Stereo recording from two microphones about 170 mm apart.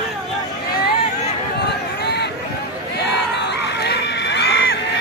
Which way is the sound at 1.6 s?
75° left (ahead or behind).